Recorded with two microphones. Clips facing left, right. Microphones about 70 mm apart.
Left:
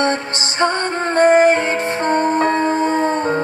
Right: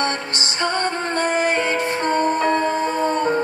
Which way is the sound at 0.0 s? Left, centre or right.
Left.